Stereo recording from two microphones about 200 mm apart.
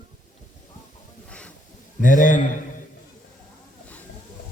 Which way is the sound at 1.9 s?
40° left (ahead or behind).